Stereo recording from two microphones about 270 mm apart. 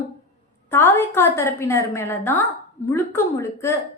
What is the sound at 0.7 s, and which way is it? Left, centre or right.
A woman's voice, centre.